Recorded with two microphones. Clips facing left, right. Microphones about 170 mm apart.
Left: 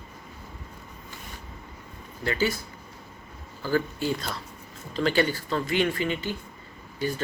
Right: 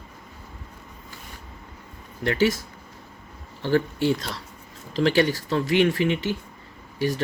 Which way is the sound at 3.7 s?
90° right.